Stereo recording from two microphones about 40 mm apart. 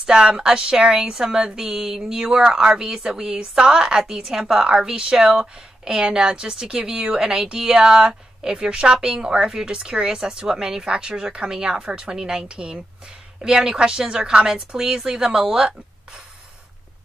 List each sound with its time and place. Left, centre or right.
0.0 s a woman's voice: right